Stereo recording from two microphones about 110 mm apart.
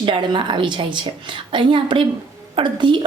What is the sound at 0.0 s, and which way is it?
A woman's voice, 45° right (ahead or behind).